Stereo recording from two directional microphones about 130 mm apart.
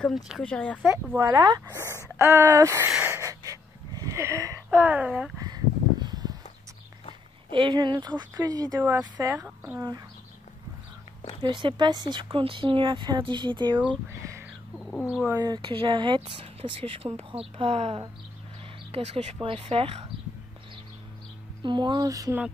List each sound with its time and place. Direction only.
0.0 s speech: 5° left (ahead or behind)
1.1 s speech: 25° right (ahead or behind)
3.0 s wheeze: 20° right (ahead or behind)
4.6 s speech: 10° right (ahead or behind)
5.4 s a sound: 30° right (ahead or behind)
7.5 s speech: 35° right (ahead or behind)
8.8 s speech: 15° right (ahead or behind)
9.2 s speech: 25° right (ahead or behind)
11.4 s speech: 35° right (ahead or behind)
14.8 s bird: 5° left (ahead or behind)
15.0 s speech: 10° right (ahead or behind)
15.3 s speech: 30° right (ahead or behind); by 20.0 s 50° right (ahead or behind)
21.6 s speech: 35° right (ahead or behind)